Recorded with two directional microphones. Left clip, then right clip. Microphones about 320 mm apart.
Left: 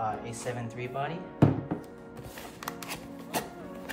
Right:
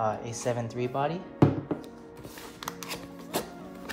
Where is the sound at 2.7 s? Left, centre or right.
Centre.